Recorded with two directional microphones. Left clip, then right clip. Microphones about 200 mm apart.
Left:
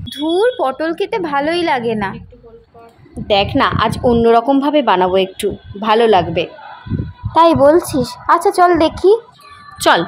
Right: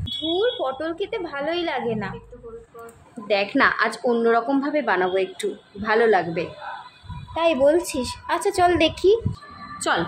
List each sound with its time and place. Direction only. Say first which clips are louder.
0.1 s speech: left 8 dB; 40° left (ahead or behind)
3.3 s a woman's voice: left 6 dB; 20° left (ahead or behind)
7.8 s a woman's voice: left 10 dB; 20° left (ahead or behind)
9.8 s speech: left 11 dB; 40° left (ahead or behind)